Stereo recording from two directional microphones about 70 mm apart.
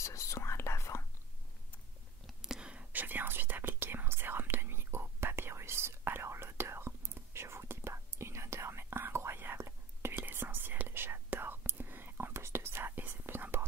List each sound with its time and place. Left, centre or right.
0.0 s whispering: left
2.4 s whispering: centre; by 13.7 s right